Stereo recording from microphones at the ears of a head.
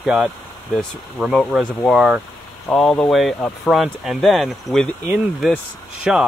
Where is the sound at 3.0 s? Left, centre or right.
Centre.